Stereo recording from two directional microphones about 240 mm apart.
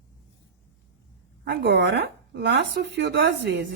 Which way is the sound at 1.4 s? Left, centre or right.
Right.